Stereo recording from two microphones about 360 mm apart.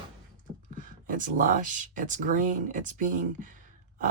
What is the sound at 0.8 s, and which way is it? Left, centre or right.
Speech, right.